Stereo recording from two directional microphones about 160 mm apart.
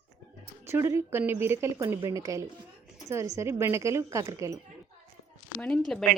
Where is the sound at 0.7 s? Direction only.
15° right (ahead or behind).